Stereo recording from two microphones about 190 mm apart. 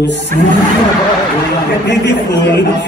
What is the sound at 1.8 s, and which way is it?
Speech, 65° left (ahead or behind).